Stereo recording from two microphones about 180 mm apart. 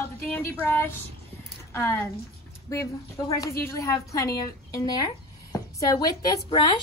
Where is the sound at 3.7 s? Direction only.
15° left (ahead or behind).